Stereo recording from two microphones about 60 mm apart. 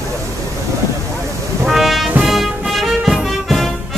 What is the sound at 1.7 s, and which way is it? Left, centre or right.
Music, centre.